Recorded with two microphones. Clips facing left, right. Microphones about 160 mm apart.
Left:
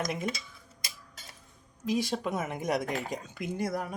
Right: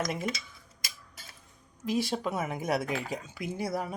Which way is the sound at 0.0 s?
Centre (ahead or behind).